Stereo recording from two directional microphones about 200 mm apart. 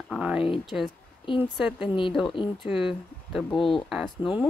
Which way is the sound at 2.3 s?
25° left (ahead or behind).